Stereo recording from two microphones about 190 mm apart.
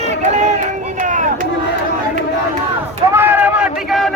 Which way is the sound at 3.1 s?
10° right (ahead or behind).